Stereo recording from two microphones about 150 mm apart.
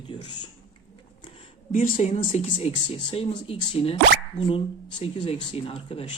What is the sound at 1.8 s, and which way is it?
Speech, 55° left (ahead or behind).